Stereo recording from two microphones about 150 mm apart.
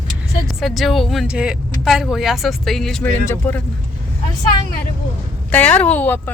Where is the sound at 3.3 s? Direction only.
15° left (ahead or behind).